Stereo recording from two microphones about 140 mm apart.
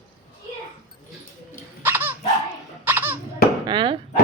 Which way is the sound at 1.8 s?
15° right (ahead or behind).